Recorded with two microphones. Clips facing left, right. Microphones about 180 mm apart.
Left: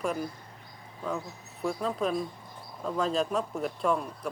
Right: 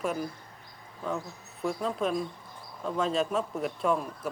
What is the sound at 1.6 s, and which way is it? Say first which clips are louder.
Speech: even; centre (ahead or behind).